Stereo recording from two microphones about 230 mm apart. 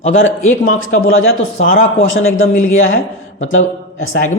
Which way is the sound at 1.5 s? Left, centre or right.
Left.